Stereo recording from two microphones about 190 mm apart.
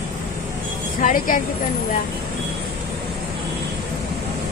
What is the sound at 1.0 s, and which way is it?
Speech, 45° left (ahead or behind).